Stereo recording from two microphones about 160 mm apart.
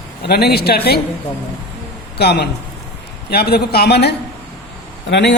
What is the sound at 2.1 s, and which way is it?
A man's voice, 90° left.